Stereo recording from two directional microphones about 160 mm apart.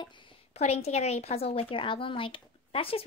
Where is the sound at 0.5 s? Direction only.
40° left (ahead or behind).